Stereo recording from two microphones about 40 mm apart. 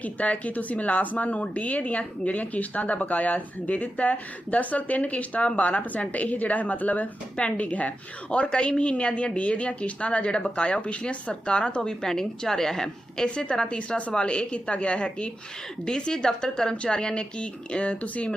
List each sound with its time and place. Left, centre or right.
0.0 s speech: left
8.3 s a woman's voice: left
13.2 s a woman's voice: left